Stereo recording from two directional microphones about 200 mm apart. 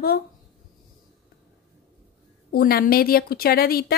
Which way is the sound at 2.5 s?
50° left (ahead or behind).